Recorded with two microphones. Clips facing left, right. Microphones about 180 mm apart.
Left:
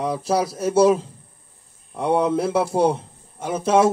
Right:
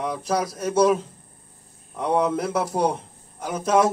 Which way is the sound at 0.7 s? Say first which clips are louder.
Left 3 dB; 30° left (ahead or behind).